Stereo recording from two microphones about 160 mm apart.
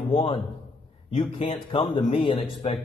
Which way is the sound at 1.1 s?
35° left (ahead or behind).